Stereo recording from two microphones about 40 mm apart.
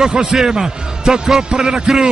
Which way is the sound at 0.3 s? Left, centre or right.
Centre.